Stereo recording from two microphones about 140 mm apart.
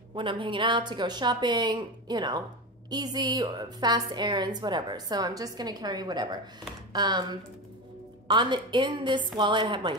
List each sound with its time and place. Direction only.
0.1 s a woman's voice: 35° right (ahead or behind)